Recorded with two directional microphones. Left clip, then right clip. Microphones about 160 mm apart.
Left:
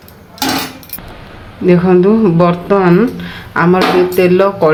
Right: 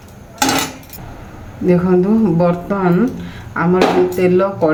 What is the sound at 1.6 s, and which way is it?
Speech, 20° left (ahead or behind).